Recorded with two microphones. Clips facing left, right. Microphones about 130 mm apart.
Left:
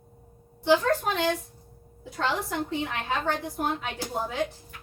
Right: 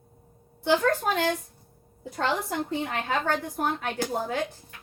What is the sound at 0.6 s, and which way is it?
Speech, 50° right (ahead or behind).